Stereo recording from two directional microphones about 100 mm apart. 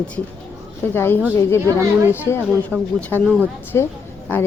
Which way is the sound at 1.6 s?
30° right (ahead or behind).